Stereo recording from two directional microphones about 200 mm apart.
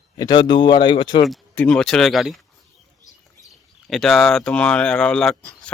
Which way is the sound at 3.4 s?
Centre (ahead or behind).